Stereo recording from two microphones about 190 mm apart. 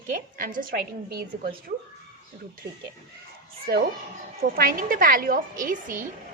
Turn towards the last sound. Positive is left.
turn(degrees=-45)  # may be behind; listen again after turning